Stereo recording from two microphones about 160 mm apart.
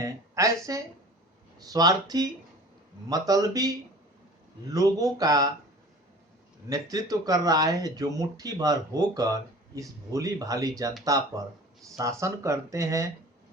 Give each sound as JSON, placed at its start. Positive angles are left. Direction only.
{"t": 0.0, "sound": "speech", "side_deg": -20}
{"t": 6.7, "sound": "speech", "side_deg": -20}